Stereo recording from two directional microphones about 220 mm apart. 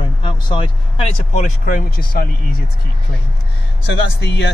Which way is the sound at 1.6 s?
40° left (ahead or behind).